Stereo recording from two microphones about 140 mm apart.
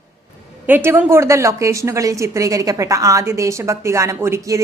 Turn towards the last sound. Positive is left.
turn(degrees=-20)  # may be behind; listen again after turning